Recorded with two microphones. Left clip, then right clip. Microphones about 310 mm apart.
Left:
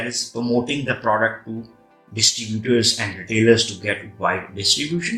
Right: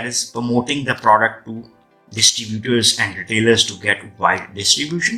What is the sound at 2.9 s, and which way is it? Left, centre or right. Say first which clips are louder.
Speech: right 4 dB; right.